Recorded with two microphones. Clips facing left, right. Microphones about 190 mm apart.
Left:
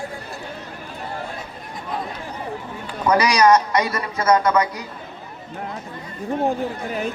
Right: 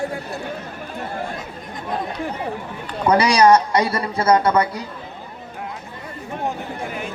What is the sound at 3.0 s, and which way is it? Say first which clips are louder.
A man's voice: right 2 dB; 30° right (ahead or behind).